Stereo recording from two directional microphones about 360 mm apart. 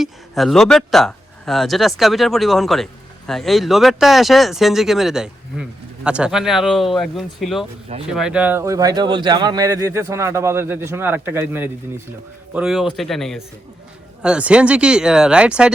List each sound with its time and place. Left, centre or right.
0.0 s speech: centre